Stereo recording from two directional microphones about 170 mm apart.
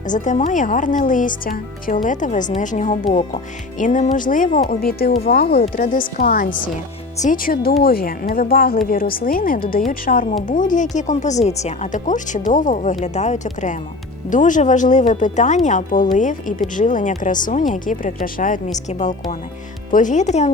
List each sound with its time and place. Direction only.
0.0 s speech: 50° left (ahead or behind)
3.1 s speech: 30° left (ahead or behind)
3.8 s speech: 50° left (ahead or behind)